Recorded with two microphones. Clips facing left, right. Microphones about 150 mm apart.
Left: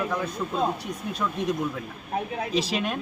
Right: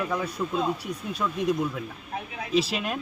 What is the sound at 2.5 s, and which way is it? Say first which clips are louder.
Speech: right 2 dB; centre (ahead or behind).